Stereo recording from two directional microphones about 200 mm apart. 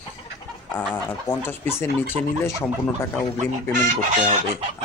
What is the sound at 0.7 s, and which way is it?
Speech, 10° left (ahead or behind).